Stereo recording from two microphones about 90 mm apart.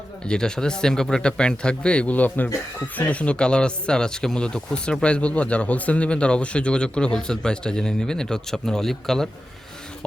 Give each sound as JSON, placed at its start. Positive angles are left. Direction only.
{"t": 0.3, "sound": "speech", "side_deg": 10}